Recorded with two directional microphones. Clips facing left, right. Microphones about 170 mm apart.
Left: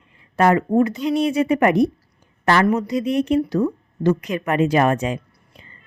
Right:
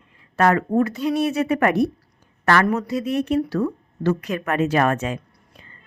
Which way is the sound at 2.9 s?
15° left (ahead or behind).